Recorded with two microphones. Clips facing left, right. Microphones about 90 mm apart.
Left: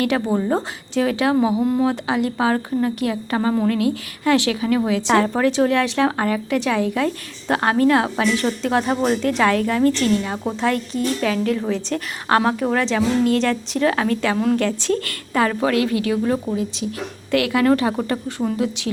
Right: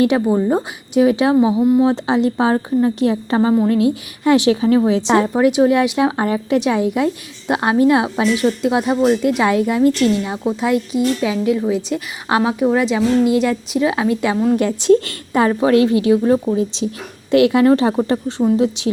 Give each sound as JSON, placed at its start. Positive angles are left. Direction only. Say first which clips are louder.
{"t": 0.3, "sound": "a woman's voice", "louder": "right 4 dB", "side_deg": -10}
{"t": 14.6, "sound": "a woman's voice", "louder": "right 7 dB", "side_deg": -15}